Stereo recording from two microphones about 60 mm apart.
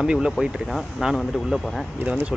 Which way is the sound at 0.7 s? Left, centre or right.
Centre.